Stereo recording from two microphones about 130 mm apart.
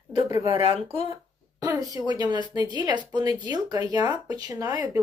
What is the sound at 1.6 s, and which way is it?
Speech, 30° right (ahead or behind).